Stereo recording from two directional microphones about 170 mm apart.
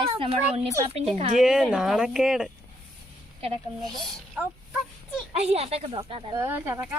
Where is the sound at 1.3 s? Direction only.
5° right (ahead or behind).